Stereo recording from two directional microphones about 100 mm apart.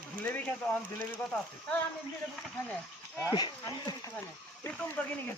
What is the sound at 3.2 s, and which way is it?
Speech, 45° left (ahead or behind).